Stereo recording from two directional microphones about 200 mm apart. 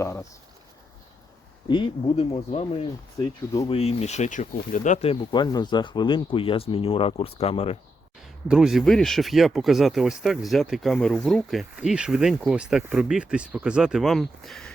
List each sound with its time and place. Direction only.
0.0 s speech: 15° left (ahead or behind)
1.6 s speech: 25° left (ahead or behind)
3.7 s speech: 30° left (ahead or behind)
5.3 s speech: 20° left (ahead or behind)
8.4 s speech: centre (ahead or behind)